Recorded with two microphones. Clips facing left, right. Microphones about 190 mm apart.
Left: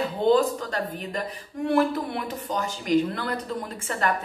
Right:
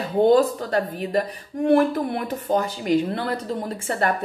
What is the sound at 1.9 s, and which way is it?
Speech, 40° right (ahead or behind).